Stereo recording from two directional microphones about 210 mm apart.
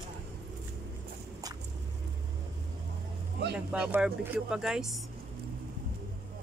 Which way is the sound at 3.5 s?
5° right (ahead or behind).